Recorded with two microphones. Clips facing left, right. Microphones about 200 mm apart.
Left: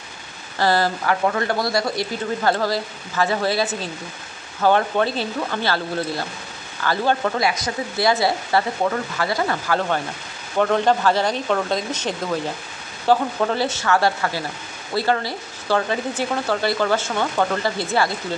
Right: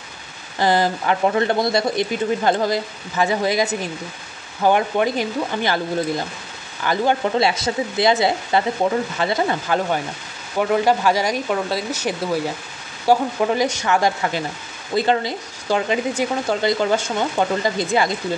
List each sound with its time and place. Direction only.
0.6 s speech: 20° right (ahead or behind)
4.6 s speech: 15° right (ahead or behind)